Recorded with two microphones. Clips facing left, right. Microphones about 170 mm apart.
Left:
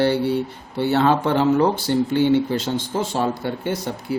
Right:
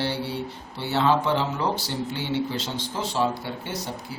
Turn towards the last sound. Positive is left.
turn(degrees=55)  # may be behind; listen again after turning